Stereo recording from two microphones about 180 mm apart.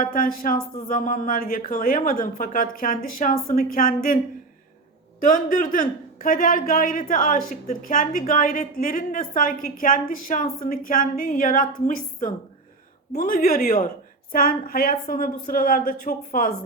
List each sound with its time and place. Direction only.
0.0 s a woman's voice: 50° left (ahead or behind)
5.2 s a woman's voice: 50° left (ahead or behind)